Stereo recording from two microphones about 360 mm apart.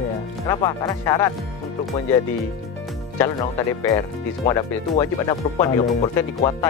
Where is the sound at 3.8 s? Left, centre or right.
Centre.